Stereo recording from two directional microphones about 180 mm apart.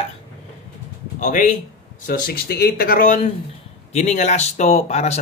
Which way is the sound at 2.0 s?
50° left (ahead or behind).